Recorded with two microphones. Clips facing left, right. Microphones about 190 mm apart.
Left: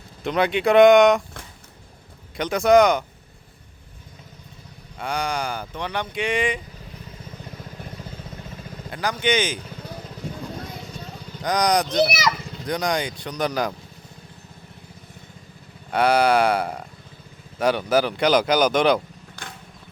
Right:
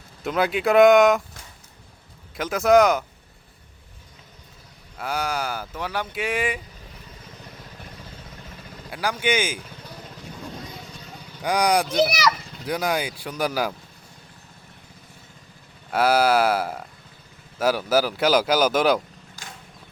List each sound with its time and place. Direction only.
0.2 s speech: centre (ahead or behind)
2.3 s speech: centre (ahead or behind)
4.9 s speech: 5° right (ahead or behind)
8.9 s speech: 10° right (ahead or behind)
11.4 s speech: 10° right (ahead or behind)
15.9 s speech: 5° right (ahead or behind)
19.4 s vehicle: 60° left (ahead or behind)